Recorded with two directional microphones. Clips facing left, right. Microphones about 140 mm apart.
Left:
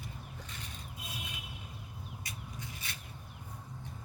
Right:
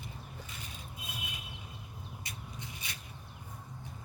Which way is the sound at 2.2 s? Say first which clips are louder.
Left 1 dB; 25° right (ahead or behind).